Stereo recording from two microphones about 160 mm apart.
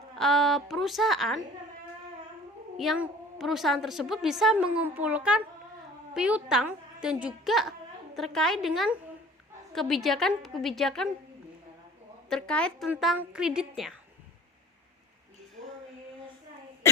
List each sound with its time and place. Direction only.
0.2 s a woman's voice: centre (ahead or behind)
2.7 s a woman's voice: centre (ahead or behind)
12.3 s a woman's voice: 5° left (ahead or behind)